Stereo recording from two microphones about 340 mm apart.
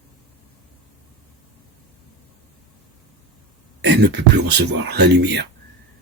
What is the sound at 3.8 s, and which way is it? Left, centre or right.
Speech, right.